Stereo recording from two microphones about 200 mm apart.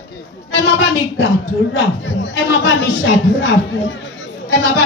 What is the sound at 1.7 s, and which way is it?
Speech, 70° left (ahead or behind).